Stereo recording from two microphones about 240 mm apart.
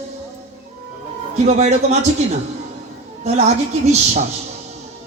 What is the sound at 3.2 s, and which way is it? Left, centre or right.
Speech, right.